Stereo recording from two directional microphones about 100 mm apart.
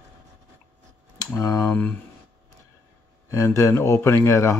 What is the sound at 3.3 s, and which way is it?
Speech, 30° left (ahead or behind).